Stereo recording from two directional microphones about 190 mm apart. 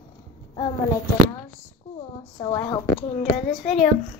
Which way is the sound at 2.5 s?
20° left (ahead or behind).